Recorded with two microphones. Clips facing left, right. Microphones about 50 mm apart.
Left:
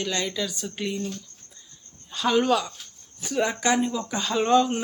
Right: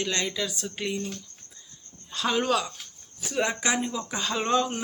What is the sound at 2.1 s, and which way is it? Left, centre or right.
Speech, centre.